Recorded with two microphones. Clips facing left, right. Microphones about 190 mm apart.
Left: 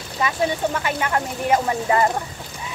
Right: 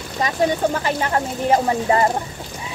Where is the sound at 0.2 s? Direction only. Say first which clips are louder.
Right 3 dB; 35° right (ahead or behind).